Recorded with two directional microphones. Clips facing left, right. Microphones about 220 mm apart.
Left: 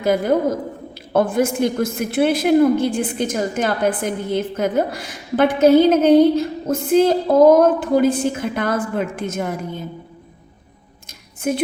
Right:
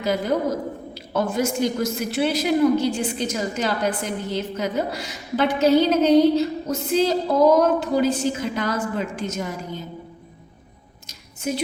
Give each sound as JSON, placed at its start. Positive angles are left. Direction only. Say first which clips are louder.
{"t": 0.0, "sound": "a woman's voice", "louder": "left 5 dB", "side_deg": 50}
{"t": 11.4, "sound": "a woman's voice", "louder": "left 5 dB", "side_deg": 55}